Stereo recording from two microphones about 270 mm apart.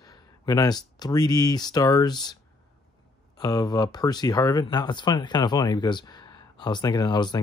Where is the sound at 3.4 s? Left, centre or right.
Centre.